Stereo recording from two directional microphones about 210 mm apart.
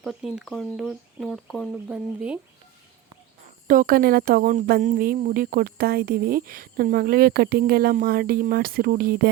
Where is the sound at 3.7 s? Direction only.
40° right (ahead or behind).